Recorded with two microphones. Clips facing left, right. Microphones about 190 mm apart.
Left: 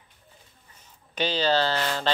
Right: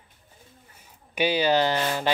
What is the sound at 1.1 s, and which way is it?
Speech, 10° right (ahead or behind).